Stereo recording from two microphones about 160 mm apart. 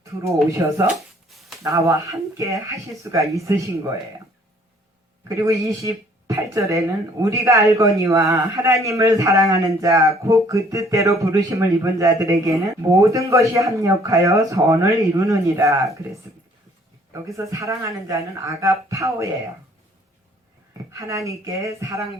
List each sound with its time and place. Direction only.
0.6 s speech: 25° right (ahead or behind)
1.3 s a sound: centre (ahead or behind)
1.6 s speech: 20° right (ahead or behind)
3.0 s speech: 20° right (ahead or behind)
5.3 s speech: 20° right (ahead or behind)
17.3 s speech: 20° right (ahead or behind)
20.9 s speech: 20° right (ahead or behind)